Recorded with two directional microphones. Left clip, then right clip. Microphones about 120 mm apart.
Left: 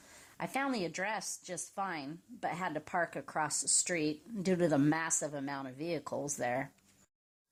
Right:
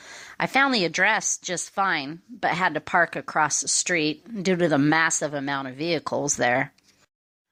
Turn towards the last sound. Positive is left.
turn(degrees=-30)  # may be behind; listen again after turning